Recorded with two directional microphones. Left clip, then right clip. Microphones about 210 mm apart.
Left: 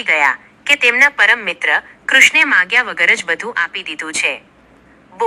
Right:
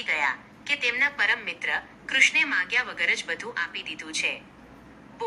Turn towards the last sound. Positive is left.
turn(degrees=35)  # may be behind; listen again after turning